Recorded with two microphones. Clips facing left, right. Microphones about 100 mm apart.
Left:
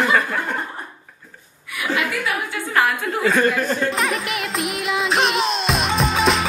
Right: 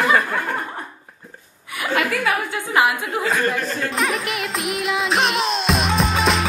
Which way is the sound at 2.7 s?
15° right (ahead or behind).